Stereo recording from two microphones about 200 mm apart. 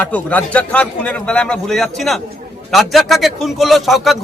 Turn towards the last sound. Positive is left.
turn(degrees=0)  # may be behind; listen again after turning